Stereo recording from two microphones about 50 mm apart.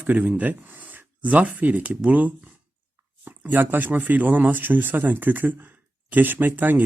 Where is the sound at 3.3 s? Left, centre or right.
Right.